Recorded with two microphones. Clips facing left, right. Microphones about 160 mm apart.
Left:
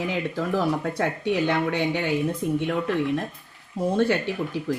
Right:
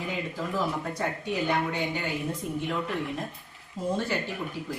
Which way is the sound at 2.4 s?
90° left.